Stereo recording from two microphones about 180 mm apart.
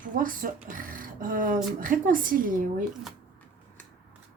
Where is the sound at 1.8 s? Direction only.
50° right (ahead or behind).